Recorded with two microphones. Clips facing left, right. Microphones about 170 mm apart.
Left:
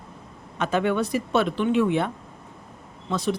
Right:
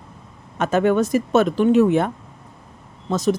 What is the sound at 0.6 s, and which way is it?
Speech, 45° right (ahead or behind).